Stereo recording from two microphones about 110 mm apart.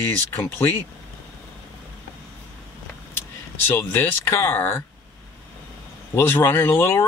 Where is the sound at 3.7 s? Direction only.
20° left (ahead or behind).